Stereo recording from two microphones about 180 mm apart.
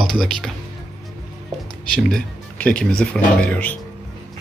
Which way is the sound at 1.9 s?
5° left (ahead or behind).